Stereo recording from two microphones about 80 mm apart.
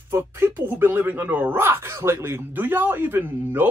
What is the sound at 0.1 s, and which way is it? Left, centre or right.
Speech, right.